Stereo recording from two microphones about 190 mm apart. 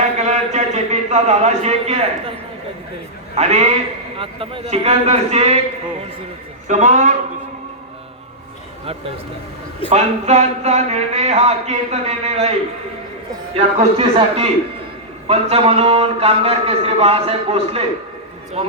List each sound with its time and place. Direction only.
0.2 s a man's voice: 35° right (ahead or behind)
3.3 s speech: 35° right (ahead or behind)
6.7 s speech: 40° right (ahead or behind)
9.9 s speech: 35° right (ahead or behind)